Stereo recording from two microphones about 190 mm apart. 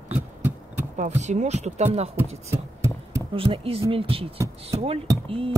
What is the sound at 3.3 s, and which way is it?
Speech, 25° right (ahead or behind).